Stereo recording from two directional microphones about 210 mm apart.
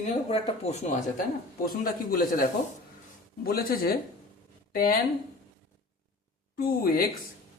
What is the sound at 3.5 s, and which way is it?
Speech, 45° left (ahead or behind).